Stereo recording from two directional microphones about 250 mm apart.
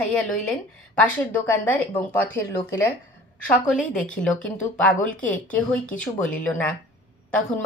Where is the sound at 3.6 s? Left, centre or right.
Centre.